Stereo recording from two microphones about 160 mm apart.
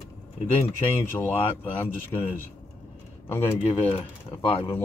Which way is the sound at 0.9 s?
15° left (ahead or behind).